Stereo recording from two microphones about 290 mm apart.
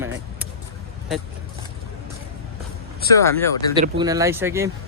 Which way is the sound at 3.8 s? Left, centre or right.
Centre.